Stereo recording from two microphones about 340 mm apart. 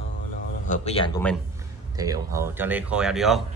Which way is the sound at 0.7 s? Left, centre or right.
Centre.